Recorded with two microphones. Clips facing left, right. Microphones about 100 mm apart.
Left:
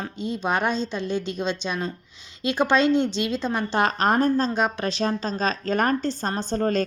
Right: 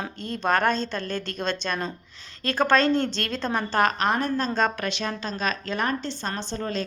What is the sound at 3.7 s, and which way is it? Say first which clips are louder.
Speech: right 1 dB; 25° left (ahead or behind).